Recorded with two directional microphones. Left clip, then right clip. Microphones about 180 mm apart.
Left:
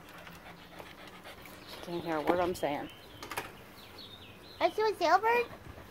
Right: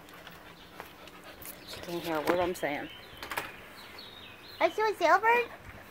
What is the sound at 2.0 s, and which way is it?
Speech, 5° right (ahead or behind).